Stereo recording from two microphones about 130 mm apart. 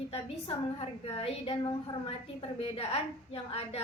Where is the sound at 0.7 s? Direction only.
45° left (ahead or behind).